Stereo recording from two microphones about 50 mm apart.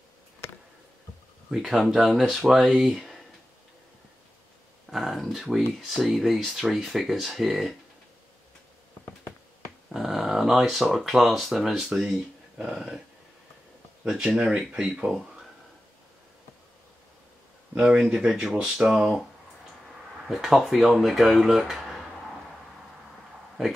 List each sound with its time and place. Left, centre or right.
1.5 s speech: centre
4.9 s a sound: centre
5.7 s speech: centre
9.9 s speech: centre
14.0 s speech: centre
17.7 s speech: centre
20.2 s speech: centre